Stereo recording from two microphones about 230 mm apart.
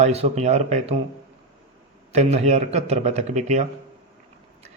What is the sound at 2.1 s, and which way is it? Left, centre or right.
Speech, right.